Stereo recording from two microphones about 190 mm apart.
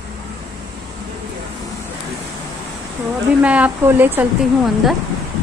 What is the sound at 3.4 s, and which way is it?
Speech, 5° right (ahead or behind).